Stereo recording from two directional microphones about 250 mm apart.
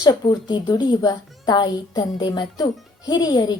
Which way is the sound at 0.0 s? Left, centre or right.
Centre.